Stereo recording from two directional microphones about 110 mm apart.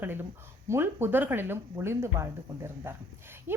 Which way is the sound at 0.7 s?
20° right (ahead or behind).